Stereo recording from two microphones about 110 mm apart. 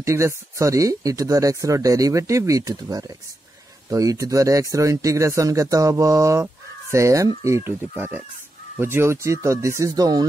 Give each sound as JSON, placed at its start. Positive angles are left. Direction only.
{"t": 0.0, "sound": "speech", "side_deg": -25}